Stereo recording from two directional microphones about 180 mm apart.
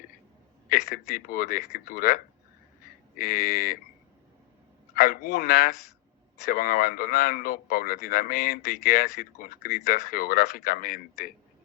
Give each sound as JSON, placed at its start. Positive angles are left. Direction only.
{"t": 0.7, "sound": "a man's voice", "side_deg": 55}
{"t": 4.9, "sound": "a man's voice", "side_deg": 55}